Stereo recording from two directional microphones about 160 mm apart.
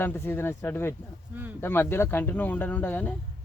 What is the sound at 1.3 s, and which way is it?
Speech, 10° right (ahead or behind).